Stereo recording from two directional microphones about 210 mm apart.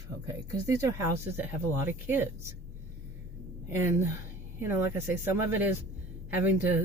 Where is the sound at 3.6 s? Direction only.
10° right (ahead or behind).